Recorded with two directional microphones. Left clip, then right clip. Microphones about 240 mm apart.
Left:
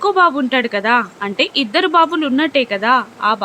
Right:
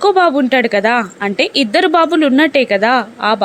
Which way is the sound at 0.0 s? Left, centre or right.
Centre.